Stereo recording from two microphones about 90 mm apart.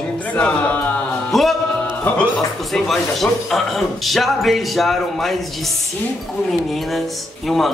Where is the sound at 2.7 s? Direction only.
5° left (ahead or behind).